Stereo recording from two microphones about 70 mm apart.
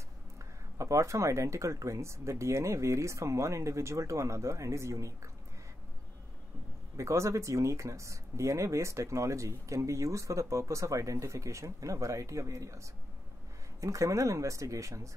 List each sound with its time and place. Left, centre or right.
0.7 s speech: right
7.0 s speech: right